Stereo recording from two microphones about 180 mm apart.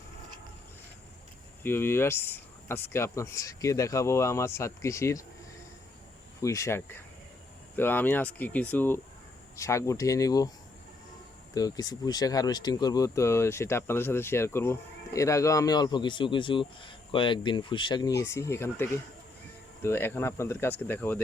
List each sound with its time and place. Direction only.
1.6 s speech: 10° left (ahead or behind)
6.4 s speech: 15° left (ahead or behind)
11.5 s speech: 20° left (ahead or behind)